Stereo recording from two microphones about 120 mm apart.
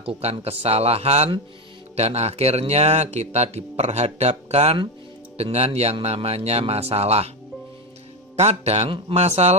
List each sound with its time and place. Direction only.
0.0 s speech: 60° right (ahead or behind)
8.4 s speech: 65° right (ahead or behind)